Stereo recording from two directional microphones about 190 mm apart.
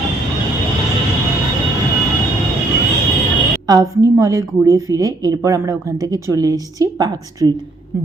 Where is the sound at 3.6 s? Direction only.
20° right (ahead or behind).